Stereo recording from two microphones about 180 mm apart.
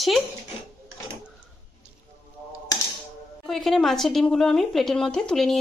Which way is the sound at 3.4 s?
Centre (ahead or behind).